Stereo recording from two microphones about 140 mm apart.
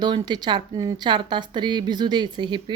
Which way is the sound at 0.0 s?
30° right (ahead or behind).